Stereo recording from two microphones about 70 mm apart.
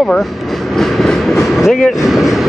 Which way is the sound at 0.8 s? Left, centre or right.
Centre.